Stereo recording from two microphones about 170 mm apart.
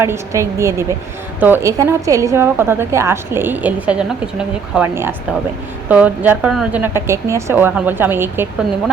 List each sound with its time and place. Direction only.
0.0 s a woman's voice: 15° right (ahead or behind)